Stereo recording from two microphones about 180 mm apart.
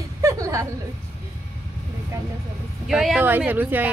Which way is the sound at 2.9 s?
Centre (ahead or behind).